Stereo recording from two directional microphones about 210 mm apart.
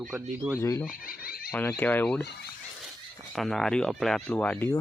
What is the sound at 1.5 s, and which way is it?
Speech, 10° left (ahead or behind).